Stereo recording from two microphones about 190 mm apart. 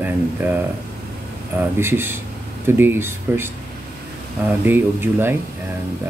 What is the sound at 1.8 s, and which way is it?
Speech, 10° right (ahead or behind).